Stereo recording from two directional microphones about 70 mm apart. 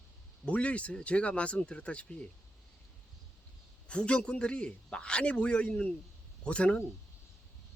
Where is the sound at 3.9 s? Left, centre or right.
Centre.